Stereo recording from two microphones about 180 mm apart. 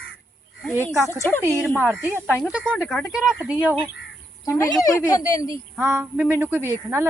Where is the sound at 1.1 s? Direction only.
15° left (ahead or behind).